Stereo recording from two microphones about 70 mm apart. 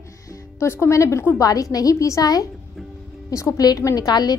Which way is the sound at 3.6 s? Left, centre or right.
Left.